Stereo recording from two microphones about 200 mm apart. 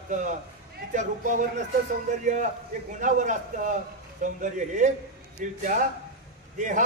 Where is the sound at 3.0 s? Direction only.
40° right (ahead or behind).